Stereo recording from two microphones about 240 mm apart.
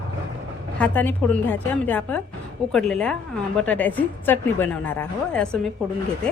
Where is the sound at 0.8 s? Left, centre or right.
Centre.